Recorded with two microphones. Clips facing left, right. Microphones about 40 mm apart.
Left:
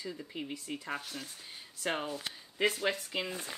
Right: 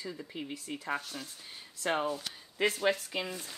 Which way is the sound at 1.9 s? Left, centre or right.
Centre.